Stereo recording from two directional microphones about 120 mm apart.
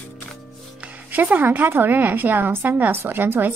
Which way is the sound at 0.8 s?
15° right (ahead or behind).